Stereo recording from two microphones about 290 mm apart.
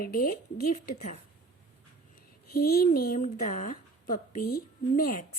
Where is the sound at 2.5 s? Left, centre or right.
Left.